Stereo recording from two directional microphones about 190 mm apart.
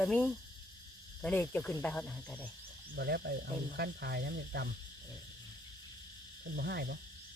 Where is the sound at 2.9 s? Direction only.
60° right (ahead or behind).